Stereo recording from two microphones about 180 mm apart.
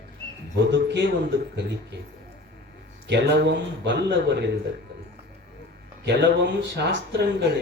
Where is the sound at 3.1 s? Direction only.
80° right.